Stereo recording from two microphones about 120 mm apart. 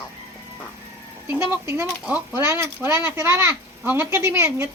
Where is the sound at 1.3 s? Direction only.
20° right (ahead or behind).